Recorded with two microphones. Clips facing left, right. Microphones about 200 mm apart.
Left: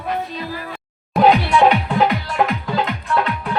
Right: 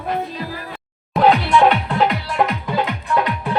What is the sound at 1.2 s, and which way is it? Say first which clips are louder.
Music: left 1 dB; 15° left (ahead or behind).